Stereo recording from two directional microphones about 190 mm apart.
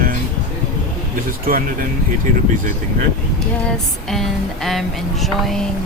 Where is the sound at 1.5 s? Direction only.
50° right (ahead or behind).